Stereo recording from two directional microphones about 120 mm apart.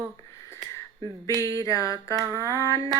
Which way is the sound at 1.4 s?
30° left (ahead or behind).